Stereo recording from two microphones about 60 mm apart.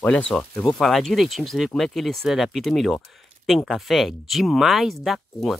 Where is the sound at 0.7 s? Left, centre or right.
Centre.